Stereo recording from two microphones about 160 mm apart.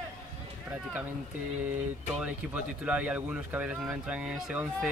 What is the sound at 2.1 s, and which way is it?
Speech, 10° right (ahead or behind).